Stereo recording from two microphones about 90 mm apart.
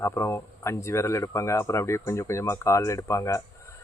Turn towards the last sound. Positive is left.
turn(degrees=35)  # may be behind; listen again after turning